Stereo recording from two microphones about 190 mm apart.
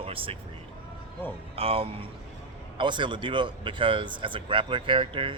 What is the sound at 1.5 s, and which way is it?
Speech, 30° right (ahead or behind).